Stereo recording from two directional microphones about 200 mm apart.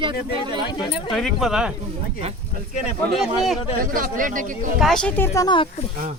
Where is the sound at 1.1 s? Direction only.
Centre (ahead or behind).